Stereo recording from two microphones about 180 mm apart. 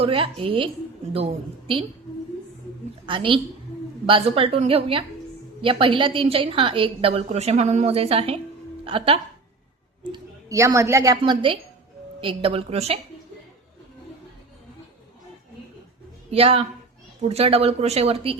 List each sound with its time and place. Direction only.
0.0 s speech: 30° right (ahead or behind)
3.1 s a woman's voice: 30° right (ahead or behind)
11.2 s speech: 30° right (ahead or behind)
16.3 s speech: 35° right (ahead or behind)